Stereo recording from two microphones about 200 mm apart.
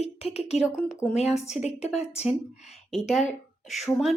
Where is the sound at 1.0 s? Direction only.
5° left (ahead or behind).